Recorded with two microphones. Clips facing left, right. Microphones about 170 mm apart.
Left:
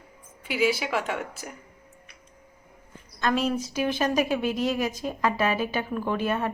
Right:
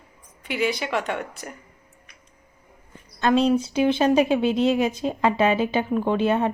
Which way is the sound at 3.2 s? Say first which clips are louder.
Right 6 dB; 25° right (ahead or behind).